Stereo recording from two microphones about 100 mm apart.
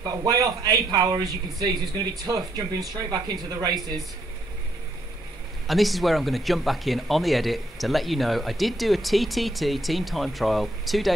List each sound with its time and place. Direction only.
0.0 s a man's voice: 40° right (ahead or behind)
5.7 s speech: centre (ahead or behind)